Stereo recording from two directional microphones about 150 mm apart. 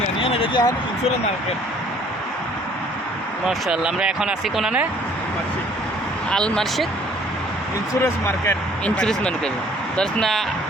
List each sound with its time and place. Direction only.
0.2 s a sound: 40° left (ahead or behind)
3.4 s speech: 5° right (ahead or behind)
6.3 s speech: 5° left (ahead or behind)
8.0 s speech: 15° left (ahead or behind)
9.0 s speech: 5° left (ahead or behind)